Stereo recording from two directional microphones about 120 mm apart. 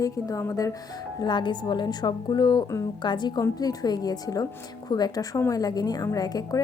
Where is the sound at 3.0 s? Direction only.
40° left (ahead or behind).